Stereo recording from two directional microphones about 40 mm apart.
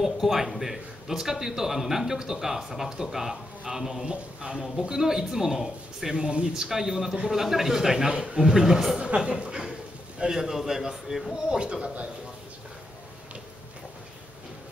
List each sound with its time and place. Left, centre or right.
0.0 s a man's voice: centre
4.0 s speech: right
4.8 s a man's voice: centre
6.2 s a man's voice: right
9.0 s a man's voice: right
10.3 s a man's voice: centre
11.3 s speech: centre